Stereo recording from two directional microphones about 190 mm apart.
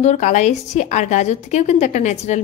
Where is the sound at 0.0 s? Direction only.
40° left (ahead or behind).